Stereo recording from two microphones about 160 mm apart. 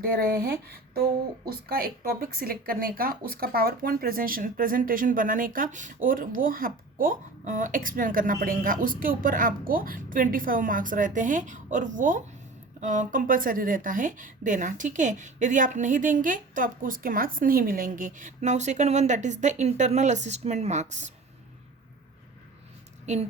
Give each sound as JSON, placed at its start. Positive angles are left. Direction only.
{"t": 0.0, "sound": "speech", "side_deg": -65}
{"t": 1.5, "sound": "a woman's voice", "side_deg": -65}